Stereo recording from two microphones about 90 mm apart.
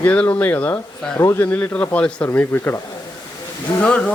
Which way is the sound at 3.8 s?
15° left (ahead or behind).